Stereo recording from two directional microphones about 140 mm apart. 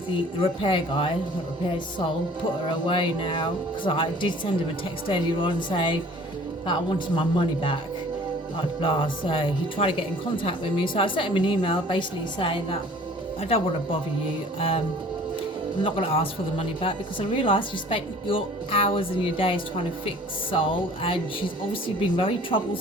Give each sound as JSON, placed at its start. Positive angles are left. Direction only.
{"t": 0.4, "sound": "speech", "side_deg": 40}
{"t": 2.6, "sound": "speech", "side_deg": 40}
{"t": 7.2, "sound": "speech", "side_deg": 40}
{"t": 8.8, "sound": "speech", "side_deg": 40}
{"t": 15.8, "sound": "speech", "side_deg": 40}